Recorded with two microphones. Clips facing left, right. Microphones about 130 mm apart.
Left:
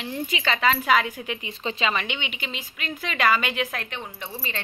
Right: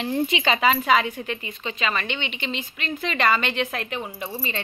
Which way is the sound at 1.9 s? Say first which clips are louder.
Right 3 dB; 15° left (ahead or behind).